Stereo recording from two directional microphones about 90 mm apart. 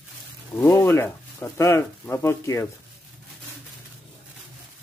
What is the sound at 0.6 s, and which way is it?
Speech, 30° left (ahead or behind).